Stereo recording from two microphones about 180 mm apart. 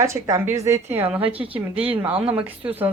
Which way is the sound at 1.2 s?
30° right (ahead or behind).